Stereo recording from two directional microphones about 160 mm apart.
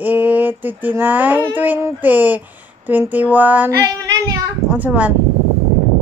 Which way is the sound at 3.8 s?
20° right (ahead or behind).